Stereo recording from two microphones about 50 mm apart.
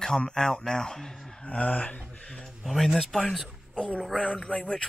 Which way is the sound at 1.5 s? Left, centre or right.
Left.